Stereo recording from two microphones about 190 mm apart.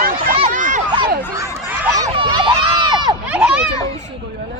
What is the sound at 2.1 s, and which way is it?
Run, 25° right (ahead or behind).